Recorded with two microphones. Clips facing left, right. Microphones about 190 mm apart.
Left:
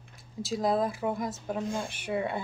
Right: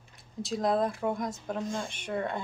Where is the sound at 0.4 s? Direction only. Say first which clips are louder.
Even; centre (ahead or behind).